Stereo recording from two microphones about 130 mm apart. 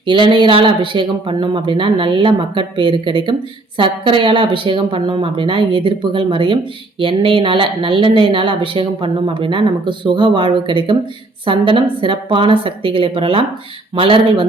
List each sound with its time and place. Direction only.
0.0 s speech: 40° right (ahead or behind)